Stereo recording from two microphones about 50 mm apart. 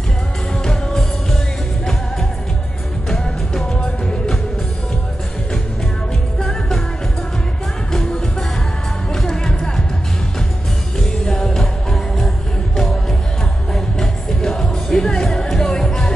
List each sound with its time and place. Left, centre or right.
0.7 s music: centre
3.7 s music: centre
7.9 s music: centre
11.0 s music: centre